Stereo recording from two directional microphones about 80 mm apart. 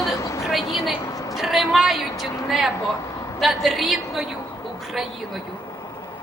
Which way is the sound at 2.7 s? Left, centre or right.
Left.